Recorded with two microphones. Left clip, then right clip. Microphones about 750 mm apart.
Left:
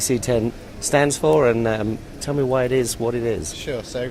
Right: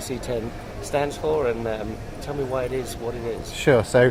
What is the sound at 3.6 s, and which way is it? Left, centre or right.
Speech, right.